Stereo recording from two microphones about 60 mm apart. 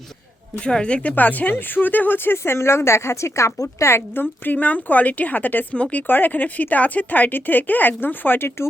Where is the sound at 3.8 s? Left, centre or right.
Left.